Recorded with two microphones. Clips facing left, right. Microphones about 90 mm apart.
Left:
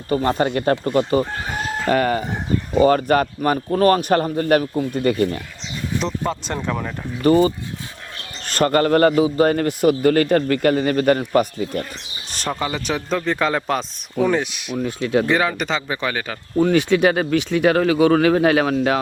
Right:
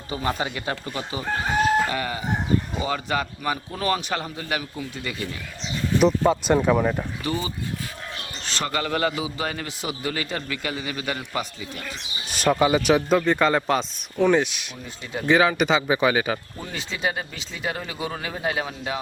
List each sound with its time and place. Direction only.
0.1 s a man's voice: 50° left (ahead or behind)
6.0 s speech: 10° right (ahead or behind)
7.2 s a man's voice: 50° left (ahead or behind)
12.3 s speech: 5° right (ahead or behind)
14.8 s speech: 75° left (ahead or behind)
15.3 s speech: 5° right (ahead or behind)
16.6 s speech: 65° left (ahead or behind)